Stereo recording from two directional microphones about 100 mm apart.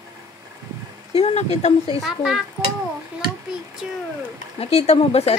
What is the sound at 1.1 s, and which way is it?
Speech, 90° left.